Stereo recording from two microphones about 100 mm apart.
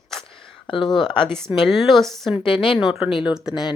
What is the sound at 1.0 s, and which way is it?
A woman's voice, 5° left (ahead or behind).